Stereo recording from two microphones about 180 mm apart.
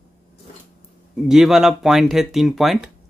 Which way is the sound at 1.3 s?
Centre (ahead or behind).